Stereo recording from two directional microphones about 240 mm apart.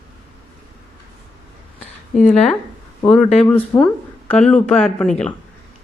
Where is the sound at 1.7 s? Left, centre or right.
Left.